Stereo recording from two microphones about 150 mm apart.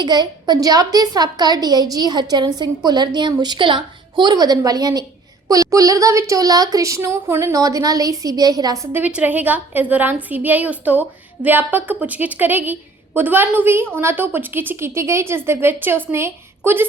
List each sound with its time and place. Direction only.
0.0 s a woman's voice: 30° right (ahead or behind)